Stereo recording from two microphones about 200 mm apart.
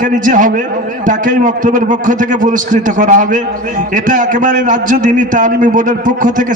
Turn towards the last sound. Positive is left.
turn(degrees=-40)  # may be behind; listen again after turning